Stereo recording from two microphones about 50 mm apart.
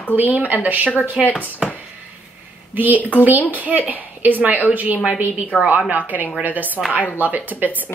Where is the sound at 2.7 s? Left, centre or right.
Right.